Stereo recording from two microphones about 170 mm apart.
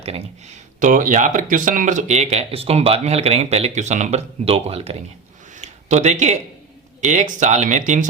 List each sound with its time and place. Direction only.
0.0 s speech: 40° right (ahead or behind)
5.5 s a sound: 40° right (ahead or behind)
7.0 s speech: 45° right (ahead or behind)